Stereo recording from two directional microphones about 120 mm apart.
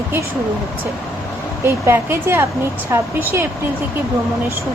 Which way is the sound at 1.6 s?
20° right (ahead or behind).